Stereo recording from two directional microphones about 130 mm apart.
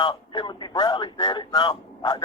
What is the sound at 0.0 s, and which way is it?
Speech, 35° left (ahead or behind).